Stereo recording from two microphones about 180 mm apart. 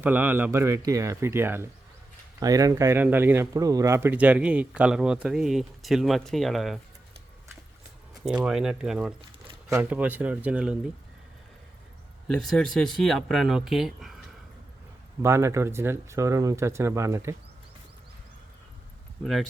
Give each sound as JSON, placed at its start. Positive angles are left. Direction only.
{"t": 0.0, "sound": "speech", "side_deg": -10}
{"t": 8.2, "sound": "speech", "side_deg": -5}
{"t": 12.3, "sound": "speech", "side_deg": 5}
{"t": 15.2, "sound": "speech", "side_deg": -15}
{"t": 19.2, "sound": "speech", "side_deg": 0}